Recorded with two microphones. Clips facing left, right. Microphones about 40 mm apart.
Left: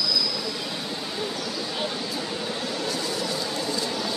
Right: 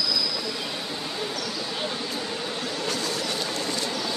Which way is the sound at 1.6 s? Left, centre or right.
Centre.